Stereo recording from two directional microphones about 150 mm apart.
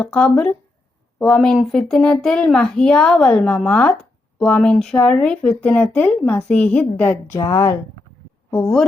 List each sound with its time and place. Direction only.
0.0 s speech: 5° left (ahead or behind)